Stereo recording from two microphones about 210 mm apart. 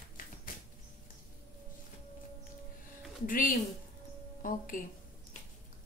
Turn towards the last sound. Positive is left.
turn(degrees=40)  # may be behind; listen again after turning